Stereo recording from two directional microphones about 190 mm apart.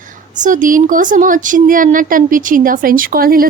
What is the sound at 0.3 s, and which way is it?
A woman's voice, 40° right (ahead or behind).